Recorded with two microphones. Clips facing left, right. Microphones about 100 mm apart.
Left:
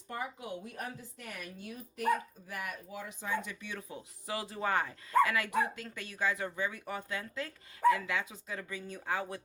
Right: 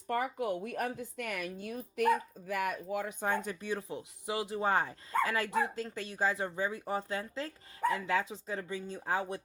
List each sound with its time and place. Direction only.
0.1 s speech: 55° right (ahead or behind)
1.5 s speech: 50° right (ahead or behind); by 4.7 s 20° right (ahead or behind)
4.7 s speech: 30° right (ahead or behind)